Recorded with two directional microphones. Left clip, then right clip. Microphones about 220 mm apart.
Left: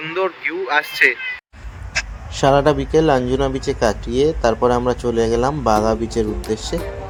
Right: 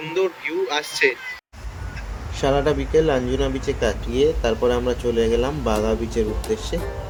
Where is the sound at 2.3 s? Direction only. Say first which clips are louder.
Left 6 dB; 30° left (ahead or behind).